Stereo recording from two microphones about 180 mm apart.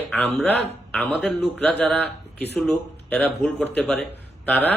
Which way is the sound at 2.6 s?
5° left (ahead or behind).